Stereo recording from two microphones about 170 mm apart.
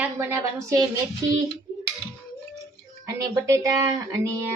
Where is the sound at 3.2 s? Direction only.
15° right (ahead or behind).